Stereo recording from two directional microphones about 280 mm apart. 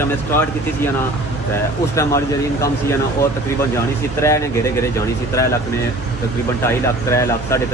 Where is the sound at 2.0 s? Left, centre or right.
Centre.